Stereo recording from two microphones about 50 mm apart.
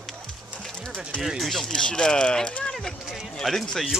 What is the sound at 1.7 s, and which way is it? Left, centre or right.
Speech, centre.